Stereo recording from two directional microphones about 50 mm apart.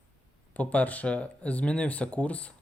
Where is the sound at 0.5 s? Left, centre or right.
Left.